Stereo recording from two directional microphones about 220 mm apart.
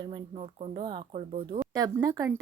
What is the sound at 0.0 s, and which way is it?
Speech, 25° right (ahead or behind).